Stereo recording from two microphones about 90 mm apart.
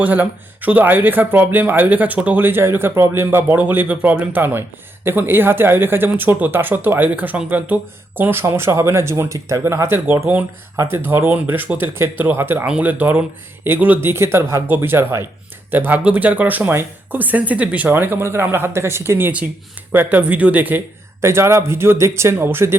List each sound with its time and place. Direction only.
0.0 s speech: 20° right (ahead or behind)
21.2 s speech: 30° right (ahead or behind)